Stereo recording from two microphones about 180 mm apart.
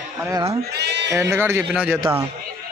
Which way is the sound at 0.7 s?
70° right (ahead or behind).